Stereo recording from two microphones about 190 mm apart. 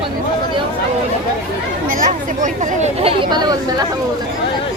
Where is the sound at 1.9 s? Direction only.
45° right (ahead or behind); by 3.9 s 20° right (ahead or behind).